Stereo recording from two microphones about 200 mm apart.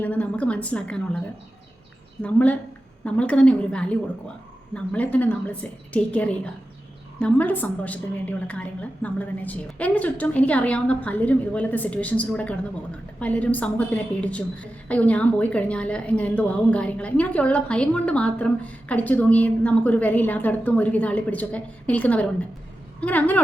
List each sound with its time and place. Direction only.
0.0 s a woman's voice: 5° left (ahead or behind)
2.2 s a woman's voice: 5° left (ahead or behind)